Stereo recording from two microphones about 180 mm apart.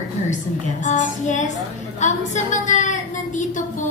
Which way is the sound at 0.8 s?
40° left (ahead or behind).